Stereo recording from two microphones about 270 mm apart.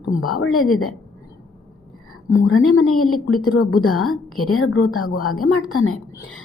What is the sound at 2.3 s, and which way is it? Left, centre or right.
A woman's voice, left.